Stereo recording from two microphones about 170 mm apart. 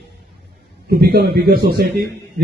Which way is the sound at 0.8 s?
65° right (ahead or behind).